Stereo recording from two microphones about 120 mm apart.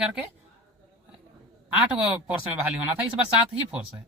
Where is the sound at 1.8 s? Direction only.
5° right (ahead or behind).